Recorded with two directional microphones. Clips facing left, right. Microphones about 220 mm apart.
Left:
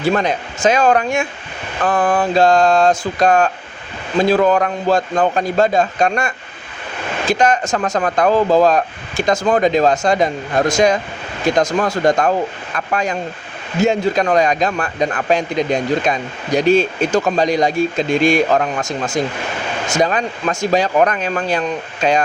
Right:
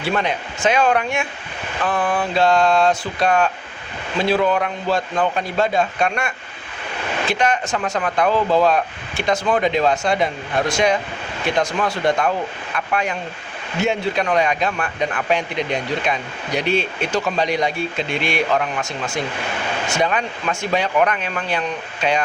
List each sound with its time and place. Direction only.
0.0 s a man's voice: 40° left (ahead or behind)